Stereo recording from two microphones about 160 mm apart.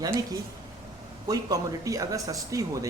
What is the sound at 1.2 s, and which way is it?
Speech, 20° right (ahead or behind).